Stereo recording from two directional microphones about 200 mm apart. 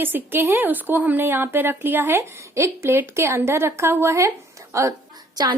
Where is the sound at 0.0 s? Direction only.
10° right (ahead or behind).